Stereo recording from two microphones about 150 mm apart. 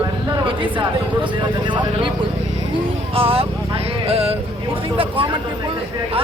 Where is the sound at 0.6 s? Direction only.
30° right (ahead or behind).